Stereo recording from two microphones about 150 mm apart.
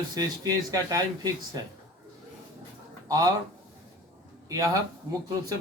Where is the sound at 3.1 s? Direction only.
25° right (ahead or behind).